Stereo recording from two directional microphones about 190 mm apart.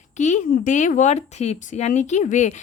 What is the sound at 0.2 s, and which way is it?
A woman's voice, 40° left (ahead or behind).